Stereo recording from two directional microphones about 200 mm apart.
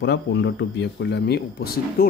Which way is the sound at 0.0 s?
60° left (ahead or behind).